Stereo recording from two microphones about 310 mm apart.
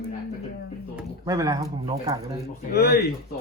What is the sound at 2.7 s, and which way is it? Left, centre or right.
Speech, left.